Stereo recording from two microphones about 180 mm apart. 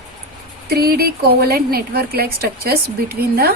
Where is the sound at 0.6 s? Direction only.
60° right (ahead or behind).